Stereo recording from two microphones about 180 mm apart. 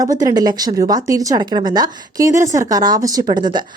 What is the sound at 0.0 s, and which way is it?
Speech, 20° right (ahead or behind).